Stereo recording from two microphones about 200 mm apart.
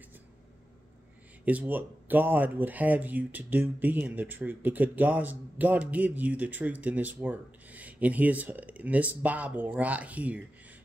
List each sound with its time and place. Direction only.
1.4 s speech: 10° right (ahead or behind)